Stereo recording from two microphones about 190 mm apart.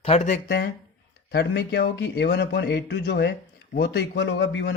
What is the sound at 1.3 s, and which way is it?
A man's voice, 60° left (ahead or behind).